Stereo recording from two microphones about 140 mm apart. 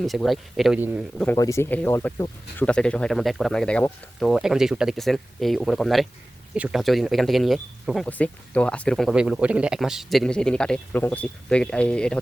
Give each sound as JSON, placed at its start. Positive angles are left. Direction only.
{"t": 0.0, "sound": "speech", "side_deg": 0}
{"t": 1.4, "sound": "speech", "side_deg": 20}
{"t": 9.1, "sound": "speech", "side_deg": -5}